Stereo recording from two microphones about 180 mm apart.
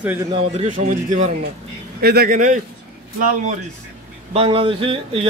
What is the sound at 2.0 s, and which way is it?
Speech, 60° right (ahead or behind).